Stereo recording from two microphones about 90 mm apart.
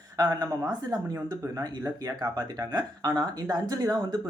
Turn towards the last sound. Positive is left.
turn(degrees=-45)  # may be behind; listen again after turning